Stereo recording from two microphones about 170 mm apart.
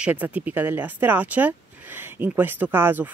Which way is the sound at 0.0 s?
10° right (ahead or behind).